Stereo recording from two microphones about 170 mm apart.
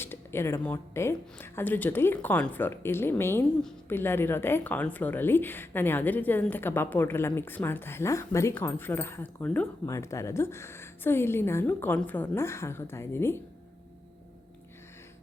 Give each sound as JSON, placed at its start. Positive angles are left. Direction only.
{"t": 0.0, "sound": "a woman's voice", "side_deg": 15}